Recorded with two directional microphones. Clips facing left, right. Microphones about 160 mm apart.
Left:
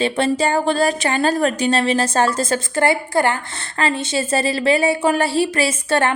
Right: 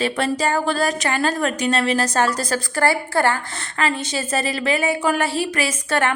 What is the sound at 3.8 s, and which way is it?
A woman's voice, 30° left (ahead or behind).